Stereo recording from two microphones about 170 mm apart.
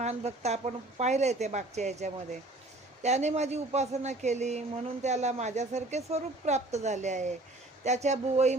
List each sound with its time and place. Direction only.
0.0 s a woman's voice: 40° right (ahead or behind)